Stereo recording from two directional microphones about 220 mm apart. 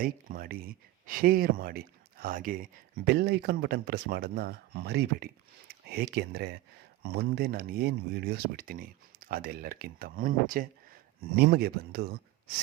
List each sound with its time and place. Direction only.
0.0 s speech: 40° right (ahead or behind)